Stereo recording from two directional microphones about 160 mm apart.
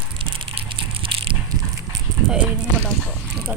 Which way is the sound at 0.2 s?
35° right (ahead or behind).